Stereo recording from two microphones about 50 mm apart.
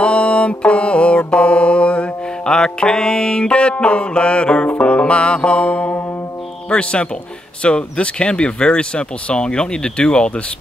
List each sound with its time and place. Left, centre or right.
0.0 s music: left